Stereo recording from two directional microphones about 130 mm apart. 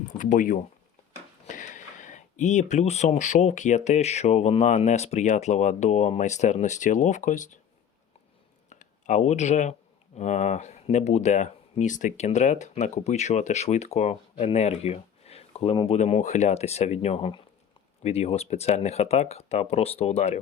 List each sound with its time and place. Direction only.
0.2 s speech: 90° left
1.5 s speech: 75° left (ahead or behind)
8.7 s speech: 70° left (ahead or behind); by 16.0 s 45° left (ahead or behind)
16.0 s speech: 65° left (ahead or behind)